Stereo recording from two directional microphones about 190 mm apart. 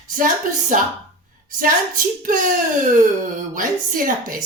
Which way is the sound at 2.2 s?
45° right (ahead or behind).